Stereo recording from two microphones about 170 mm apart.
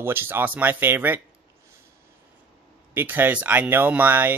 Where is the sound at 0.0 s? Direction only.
15° right (ahead or behind).